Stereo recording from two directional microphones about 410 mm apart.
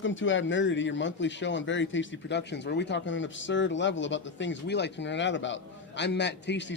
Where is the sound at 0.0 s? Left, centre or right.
Left.